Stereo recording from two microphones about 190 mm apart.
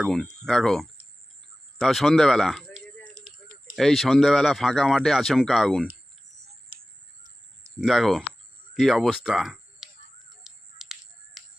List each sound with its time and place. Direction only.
0.0 s speech: 5° left (ahead or behind)
2.7 s a sound: 40° right (ahead or behind)
3.8 s speech: centre (ahead or behind)
7.8 s speech: centre (ahead or behind)
10.4 s music: centre (ahead or behind)